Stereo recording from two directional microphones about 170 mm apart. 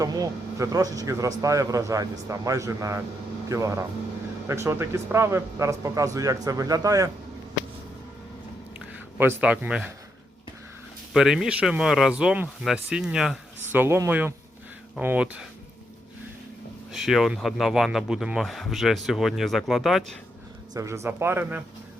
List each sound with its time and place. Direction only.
0.0 s speech: 20° right (ahead or behind)
9.1 s speech: 15° right (ahead or behind)
11.1 s speech: 5° right (ahead or behind)
16.9 s speech: centre (ahead or behind)
20.7 s speech: 15° right (ahead or behind)